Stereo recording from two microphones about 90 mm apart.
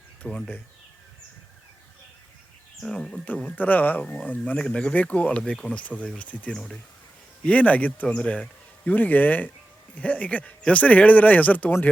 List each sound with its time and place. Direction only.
0.2 s speech: 15° left (ahead or behind)
2.8 s speech: 5° left (ahead or behind)
3.2 s speech: 15° left (ahead or behind)
6.5 s speech: 5° left (ahead or behind)
7.4 s speech: 15° left (ahead or behind)